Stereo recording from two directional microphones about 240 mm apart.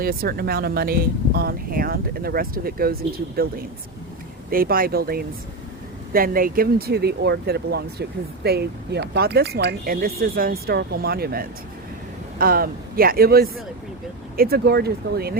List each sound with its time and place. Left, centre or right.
0.0 s speech: right
4.4 s speech: right